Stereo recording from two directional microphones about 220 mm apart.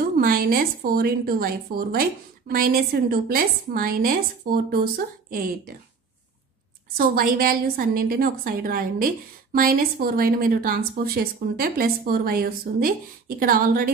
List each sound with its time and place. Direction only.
0.2 s a woman's voice: 40° right (ahead or behind)
7.0 s a woman's voice: 40° right (ahead or behind)